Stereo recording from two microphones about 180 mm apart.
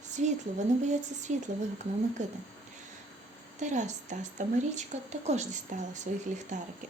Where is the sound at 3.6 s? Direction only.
40° right (ahead or behind).